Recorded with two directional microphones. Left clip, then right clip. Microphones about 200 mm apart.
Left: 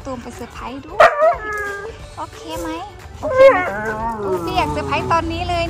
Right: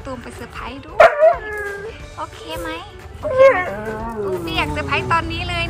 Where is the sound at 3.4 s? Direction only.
5° left (ahead or behind).